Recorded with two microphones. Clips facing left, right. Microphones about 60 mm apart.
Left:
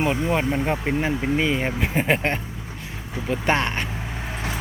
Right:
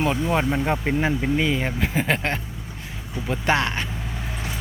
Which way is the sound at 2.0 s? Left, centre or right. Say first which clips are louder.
Left 2 dB; left.